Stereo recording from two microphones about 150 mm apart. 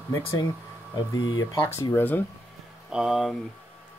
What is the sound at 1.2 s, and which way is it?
Speech, 30° left (ahead or behind).